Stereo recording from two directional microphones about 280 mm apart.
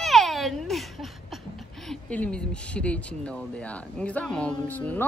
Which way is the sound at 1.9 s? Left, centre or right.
Centre.